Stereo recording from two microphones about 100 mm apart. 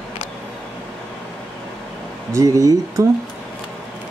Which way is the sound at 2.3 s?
35° right (ahead or behind).